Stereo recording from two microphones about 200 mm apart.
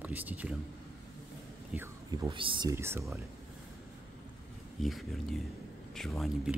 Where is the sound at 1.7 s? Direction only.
15° right (ahead or behind).